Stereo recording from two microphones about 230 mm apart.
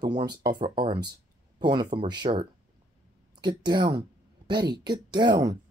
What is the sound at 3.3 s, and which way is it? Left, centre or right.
Speech, centre.